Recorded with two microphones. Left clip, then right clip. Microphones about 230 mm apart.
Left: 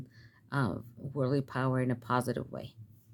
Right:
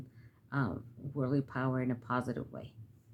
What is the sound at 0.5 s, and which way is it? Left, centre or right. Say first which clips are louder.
Speech: left 3 dB; left.